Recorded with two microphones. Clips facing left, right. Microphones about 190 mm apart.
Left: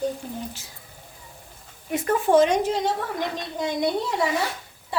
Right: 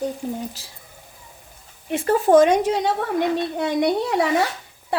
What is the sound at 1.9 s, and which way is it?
Speech, 30° right (ahead or behind).